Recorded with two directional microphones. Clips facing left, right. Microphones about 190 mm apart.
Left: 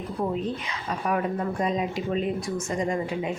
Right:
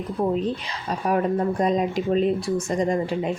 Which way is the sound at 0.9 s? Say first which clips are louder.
Right 4 dB; 35° right (ahead or behind).